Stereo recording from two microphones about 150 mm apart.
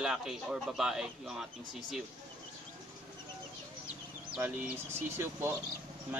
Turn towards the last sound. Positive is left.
turn(degrees=-15)  # may be behind; listen again after turning